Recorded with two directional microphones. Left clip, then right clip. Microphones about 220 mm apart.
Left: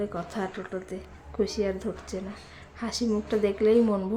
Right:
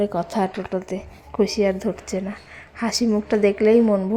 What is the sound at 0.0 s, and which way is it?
A woman's voice, 30° right (ahead or behind).